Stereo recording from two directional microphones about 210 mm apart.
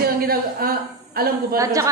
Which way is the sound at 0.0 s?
45° right (ahead or behind).